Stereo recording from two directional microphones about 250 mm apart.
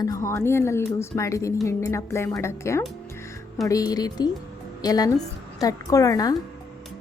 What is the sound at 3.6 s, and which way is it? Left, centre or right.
Speech, centre.